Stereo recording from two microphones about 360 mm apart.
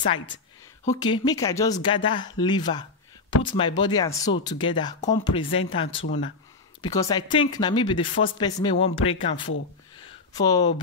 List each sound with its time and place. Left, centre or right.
0.8 s speech: centre
6.0 s speech: left
6.8 s speech: centre
8.7 s speech: left
9.2 s speech: centre